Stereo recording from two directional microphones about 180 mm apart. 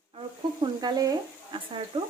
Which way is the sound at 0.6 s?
20° right (ahead or behind).